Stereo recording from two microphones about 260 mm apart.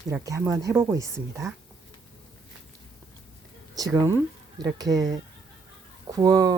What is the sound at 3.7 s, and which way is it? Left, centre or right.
Speech, centre.